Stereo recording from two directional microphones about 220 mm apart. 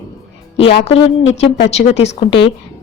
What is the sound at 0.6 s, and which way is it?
Speech, 50° left (ahead or behind).